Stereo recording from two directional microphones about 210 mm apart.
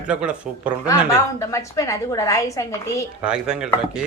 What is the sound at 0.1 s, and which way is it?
Speech, 5° right (ahead or behind).